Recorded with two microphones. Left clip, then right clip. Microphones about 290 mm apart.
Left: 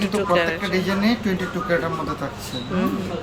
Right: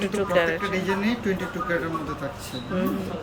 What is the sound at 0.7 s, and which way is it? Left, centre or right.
Speech, centre.